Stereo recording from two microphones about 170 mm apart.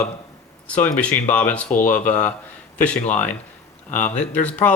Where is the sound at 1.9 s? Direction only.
5° left (ahead or behind).